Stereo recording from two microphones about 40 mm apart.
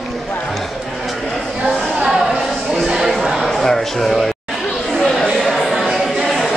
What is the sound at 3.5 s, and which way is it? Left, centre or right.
Speech, centre.